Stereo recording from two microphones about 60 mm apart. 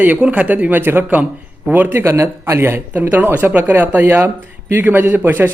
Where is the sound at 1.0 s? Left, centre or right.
Right.